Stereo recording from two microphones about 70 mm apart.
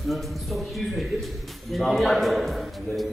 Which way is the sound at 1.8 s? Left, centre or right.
Centre.